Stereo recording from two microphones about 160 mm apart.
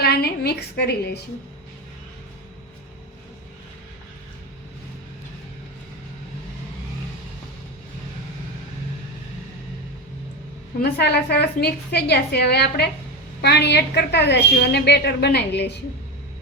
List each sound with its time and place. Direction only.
0.0 s a woman's voice: 85° left
10.8 s a woman's voice: 90° left